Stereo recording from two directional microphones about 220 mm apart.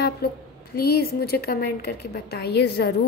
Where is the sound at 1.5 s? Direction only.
45° left (ahead or behind).